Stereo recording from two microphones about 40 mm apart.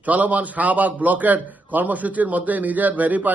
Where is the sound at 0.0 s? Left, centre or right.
Right.